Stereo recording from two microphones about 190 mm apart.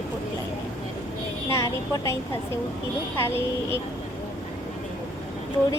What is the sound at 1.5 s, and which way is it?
A woman's voice, 15° left (ahead or behind).